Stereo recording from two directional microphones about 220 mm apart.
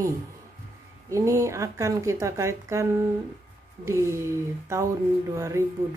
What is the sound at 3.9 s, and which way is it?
Speech, 15° right (ahead or behind).